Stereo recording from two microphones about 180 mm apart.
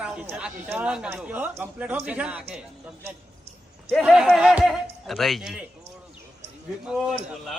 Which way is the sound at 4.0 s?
Centre (ahead or behind).